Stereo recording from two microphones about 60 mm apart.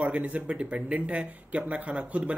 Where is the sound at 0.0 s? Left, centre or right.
Right.